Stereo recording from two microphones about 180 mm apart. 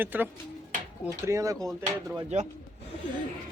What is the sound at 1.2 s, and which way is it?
Speech, 20° right (ahead or behind).